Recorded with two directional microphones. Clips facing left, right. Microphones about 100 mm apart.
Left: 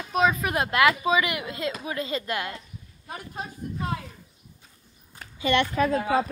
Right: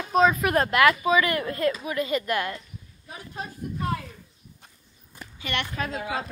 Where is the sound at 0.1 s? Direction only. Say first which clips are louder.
Right 3 dB; 5° left (ahead or behind).